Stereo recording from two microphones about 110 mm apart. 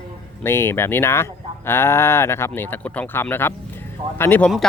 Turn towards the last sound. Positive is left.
turn(degrees=20)  # may be behind; listen again after turning